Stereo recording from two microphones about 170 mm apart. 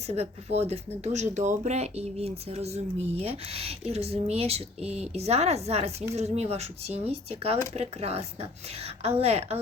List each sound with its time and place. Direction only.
0.1 s speech: 40° right (ahead or behind)